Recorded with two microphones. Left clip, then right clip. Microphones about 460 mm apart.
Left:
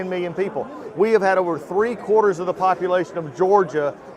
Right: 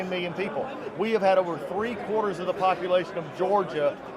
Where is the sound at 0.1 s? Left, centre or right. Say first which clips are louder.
Left 5 dB; left.